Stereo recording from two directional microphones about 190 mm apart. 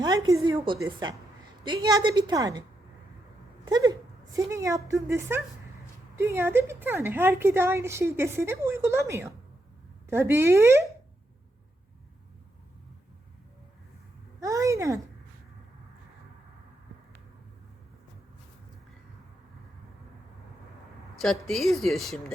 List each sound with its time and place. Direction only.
0.0 s a woman's voice: 20° right (ahead or behind)
3.7 s a woman's voice: 20° right (ahead or behind)
14.4 s a woman's voice: 15° right (ahead or behind)
21.4 s speech: centre (ahead or behind)